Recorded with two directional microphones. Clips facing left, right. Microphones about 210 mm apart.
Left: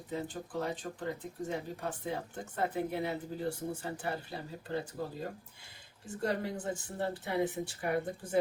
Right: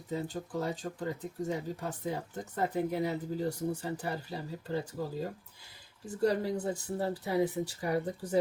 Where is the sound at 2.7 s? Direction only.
40° right (ahead or behind).